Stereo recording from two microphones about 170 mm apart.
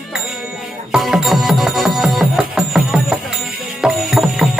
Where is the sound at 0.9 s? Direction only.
Centre (ahead or behind).